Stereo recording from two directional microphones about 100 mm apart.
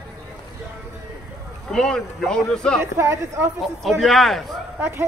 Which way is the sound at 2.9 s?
30° right (ahead or behind).